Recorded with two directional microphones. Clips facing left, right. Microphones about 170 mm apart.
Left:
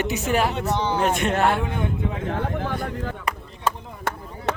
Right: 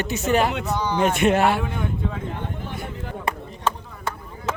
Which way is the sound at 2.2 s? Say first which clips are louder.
Left 5 dB; 85° left.